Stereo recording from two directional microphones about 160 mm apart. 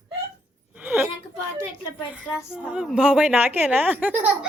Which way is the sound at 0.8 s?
10° right (ahead or behind).